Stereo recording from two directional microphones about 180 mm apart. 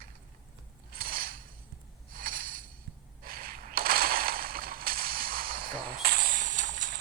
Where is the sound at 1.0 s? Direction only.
55° right (ahead or behind).